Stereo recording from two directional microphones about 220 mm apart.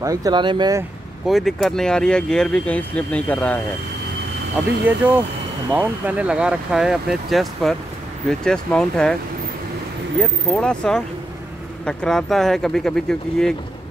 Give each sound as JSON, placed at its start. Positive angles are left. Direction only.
{"t": 0.0, "sound": "speech", "side_deg": -15}
{"t": 1.2, "sound": "speech", "side_deg": 0}
{"t": 4.8, "sound": "speech", "side_deg": -10}
{"t": 10.5, "sound": "speech", "side_deg": 5}